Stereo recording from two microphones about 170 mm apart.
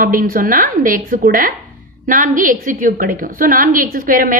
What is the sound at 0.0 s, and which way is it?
A woman's voice, 55° right (ahead or behind).